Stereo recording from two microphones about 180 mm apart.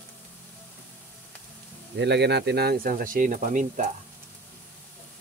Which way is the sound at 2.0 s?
70° right (ahead or behind).